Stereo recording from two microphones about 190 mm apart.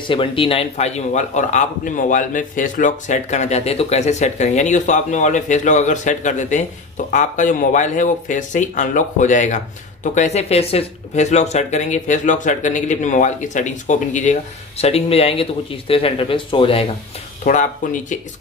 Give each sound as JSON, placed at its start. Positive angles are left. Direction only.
{"t": 0.0, "sound": "speech", "side_deg": 25}
{"t": 17.4, "sound": "speech", "side_deg": 40}